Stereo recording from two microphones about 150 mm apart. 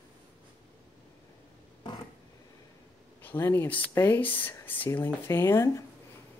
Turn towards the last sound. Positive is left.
turn(degrees=15)  # may be behind; listen again after turning